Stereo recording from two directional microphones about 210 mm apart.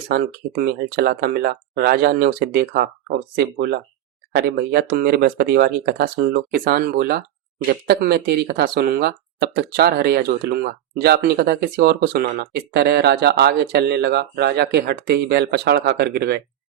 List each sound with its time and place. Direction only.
0.1 s speech: 50° right (ahead or behind)